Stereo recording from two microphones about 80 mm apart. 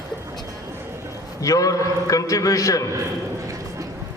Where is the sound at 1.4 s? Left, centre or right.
Left.